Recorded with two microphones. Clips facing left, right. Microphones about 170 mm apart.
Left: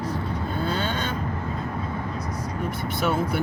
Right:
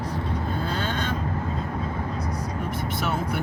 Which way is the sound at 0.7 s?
Centre (ahead or behind).